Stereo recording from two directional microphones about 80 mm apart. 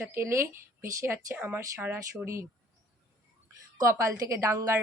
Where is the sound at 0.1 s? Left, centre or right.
Right.